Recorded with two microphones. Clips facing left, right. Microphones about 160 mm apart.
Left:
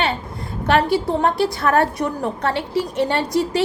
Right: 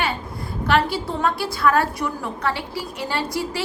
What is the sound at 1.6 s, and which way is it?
Speech, 45° left (ahead or behind).